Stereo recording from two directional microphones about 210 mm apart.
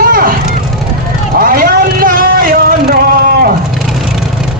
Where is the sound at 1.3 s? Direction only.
45° right (ahead or behind).